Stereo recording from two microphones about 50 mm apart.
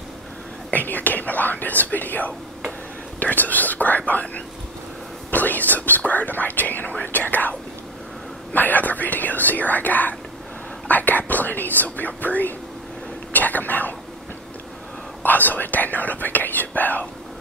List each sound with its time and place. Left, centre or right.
0.7 s speech: left
8.5 s speech: left
10.9 s whispering: left
12.2 s speech: left
15.2 s speech: left